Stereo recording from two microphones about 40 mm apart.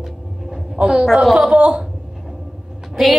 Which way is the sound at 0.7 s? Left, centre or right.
Right.